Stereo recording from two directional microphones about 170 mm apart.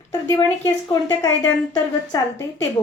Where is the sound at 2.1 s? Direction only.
20° left (ahead or behind).